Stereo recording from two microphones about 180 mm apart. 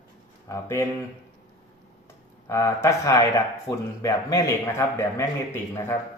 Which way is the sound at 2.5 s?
15° left (ahead or behind).